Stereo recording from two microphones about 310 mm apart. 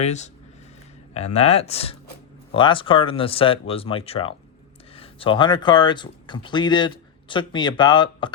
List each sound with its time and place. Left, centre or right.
0.0 s speech: left